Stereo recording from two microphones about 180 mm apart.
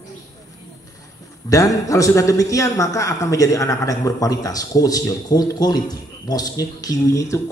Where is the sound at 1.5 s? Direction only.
20° left (ahead or behind).